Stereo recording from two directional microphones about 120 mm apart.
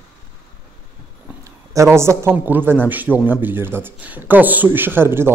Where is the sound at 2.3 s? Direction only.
15° right (ahead or behind).